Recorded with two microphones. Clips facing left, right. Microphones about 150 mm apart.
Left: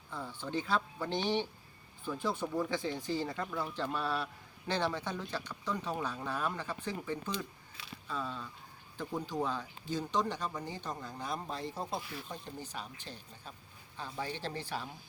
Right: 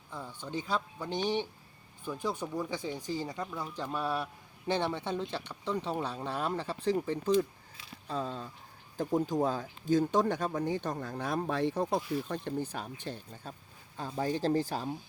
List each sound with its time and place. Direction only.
0.1 s speech: 15° right (ahead or behind); by 13.5 s 55° right (ahead or behind)
13.9 s speech: 40° right (ahead or behind)